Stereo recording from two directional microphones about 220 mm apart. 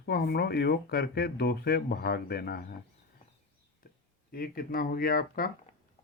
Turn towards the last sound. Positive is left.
turn(degrees=40)  # may be behind; listen again after turning